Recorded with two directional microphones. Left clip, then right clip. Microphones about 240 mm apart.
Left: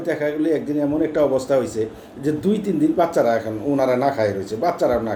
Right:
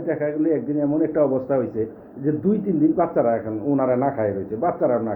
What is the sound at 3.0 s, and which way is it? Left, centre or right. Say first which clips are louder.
A man's voice: left 2 dB; centre.